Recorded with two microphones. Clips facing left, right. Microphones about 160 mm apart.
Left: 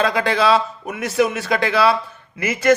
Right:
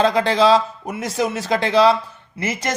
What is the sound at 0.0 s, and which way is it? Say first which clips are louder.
A man's voice: right 2 dB; 30° right (ahead or behind).